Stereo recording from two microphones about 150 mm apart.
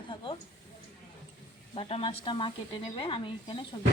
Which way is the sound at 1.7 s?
40° left (ahead or behind).